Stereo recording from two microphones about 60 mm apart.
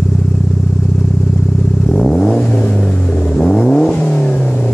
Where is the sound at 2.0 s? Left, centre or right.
Centre.